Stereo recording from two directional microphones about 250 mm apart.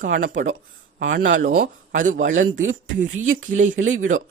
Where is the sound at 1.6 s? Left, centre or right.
Right.